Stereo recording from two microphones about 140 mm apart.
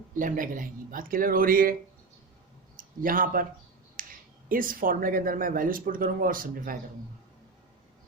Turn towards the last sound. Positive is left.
turn(degrees=-85)